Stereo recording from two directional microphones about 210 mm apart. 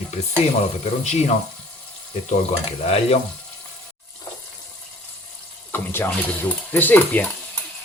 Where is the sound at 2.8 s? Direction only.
30° left (ahead or behind).